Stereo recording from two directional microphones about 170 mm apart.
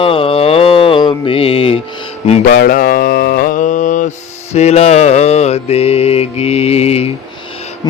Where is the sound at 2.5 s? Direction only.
60° left (ahead or behind); by 7.1 s 35° left (ahead or behind).